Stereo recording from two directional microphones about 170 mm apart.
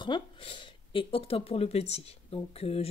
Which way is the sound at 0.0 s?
30° left (ahead or behind).